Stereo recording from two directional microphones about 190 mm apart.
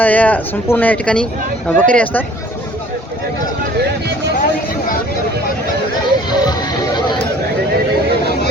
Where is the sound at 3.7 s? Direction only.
60° right (ahead or behind).